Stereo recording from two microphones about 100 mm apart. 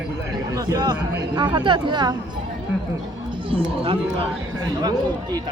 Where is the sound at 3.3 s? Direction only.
60° right (ahead or behind).